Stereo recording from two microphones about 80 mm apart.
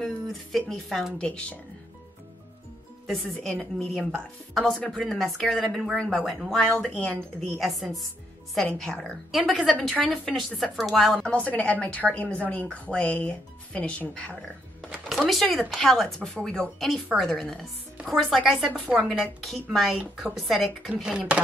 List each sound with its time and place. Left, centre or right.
0.0 s speech: centre
1.1 s speech: centre
3.1 s speech: centre
9.3 s speech: centre
9.8 s speech: centre
11.2 s speech: centre
15.0 s speech: centre
20.9 s speech: centre